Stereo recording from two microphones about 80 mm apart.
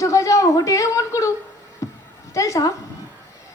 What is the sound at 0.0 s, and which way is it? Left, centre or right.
A child's voice, left.